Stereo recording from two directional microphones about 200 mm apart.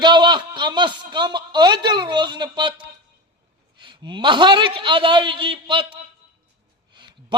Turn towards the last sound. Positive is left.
turn(degrees=-25)  # may be behind; listen again after turning